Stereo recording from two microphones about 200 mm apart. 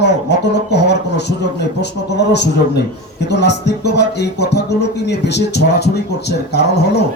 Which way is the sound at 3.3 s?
55° left (ahead or behind).